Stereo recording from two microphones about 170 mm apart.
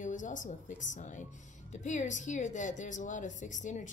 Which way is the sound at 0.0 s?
50° left (ahead or behind).